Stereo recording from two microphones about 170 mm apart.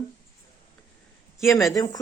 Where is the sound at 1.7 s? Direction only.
20° left (ahead or behind).